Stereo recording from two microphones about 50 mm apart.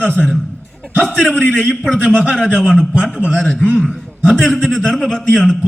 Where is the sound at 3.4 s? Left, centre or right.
Left.